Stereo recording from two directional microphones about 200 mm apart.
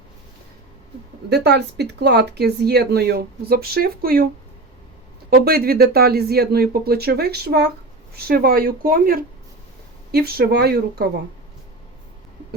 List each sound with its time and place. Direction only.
1.3 s speech: 55° right (ahead or behind)
5.3 s speech: 50° right (ahead or behind)